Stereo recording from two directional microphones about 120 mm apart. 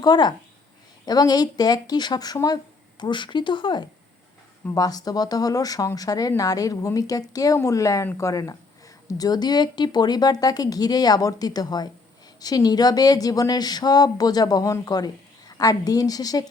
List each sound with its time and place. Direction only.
0.0 s speech: 35° left (ahead or behind)